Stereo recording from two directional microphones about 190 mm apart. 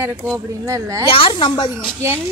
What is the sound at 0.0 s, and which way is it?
A woman's voice, 10° right (ahead or behind).